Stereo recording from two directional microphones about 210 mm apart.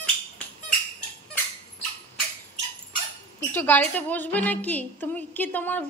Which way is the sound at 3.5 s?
10° left (ahead or behind).